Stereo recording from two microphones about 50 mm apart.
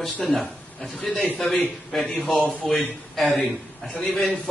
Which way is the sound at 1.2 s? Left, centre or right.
Left.